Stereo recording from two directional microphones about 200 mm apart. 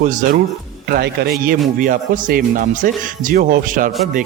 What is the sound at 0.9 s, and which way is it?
A man's voice, 55° right (ahead or behind).